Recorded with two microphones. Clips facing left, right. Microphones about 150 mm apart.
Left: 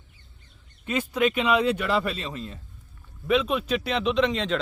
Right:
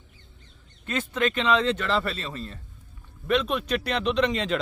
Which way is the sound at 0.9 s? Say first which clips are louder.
Left 2 dB; 10° left (ahead or behind).